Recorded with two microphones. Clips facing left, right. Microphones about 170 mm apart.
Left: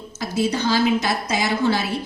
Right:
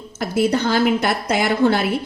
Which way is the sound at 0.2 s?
55° right (ahead or behind).